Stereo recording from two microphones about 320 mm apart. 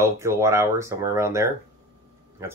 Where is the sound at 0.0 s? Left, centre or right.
Centre.